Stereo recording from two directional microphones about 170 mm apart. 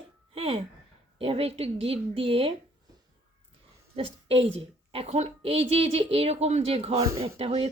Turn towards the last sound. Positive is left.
turn(degrees=-30)  # may be behind; listen again after turning